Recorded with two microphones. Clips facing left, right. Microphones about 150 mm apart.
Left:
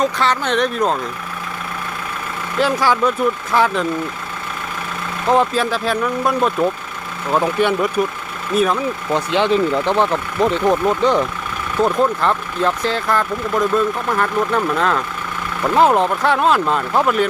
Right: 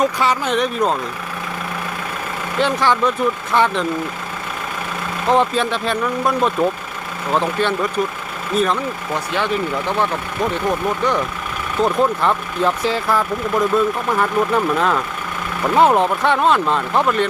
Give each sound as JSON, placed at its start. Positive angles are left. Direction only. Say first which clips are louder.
{"t": 0.0, "sound": "speech", "louder": "even", "side_deg": -10}
{"t": 2.6, "sound": "speech", "louder": "left 1 dB", "side_deg": 5}
{"t": 5.3, "sound": "speech", "louder": "left 1 dB", "side_deg": 0}
{"t": 9.1, "sound": "speech", "louder": "left 5 dB", "side_deg": 25}
{"t": 11.8, "sound": "speech", "louder": "left 1 dB", "side_deg": 0}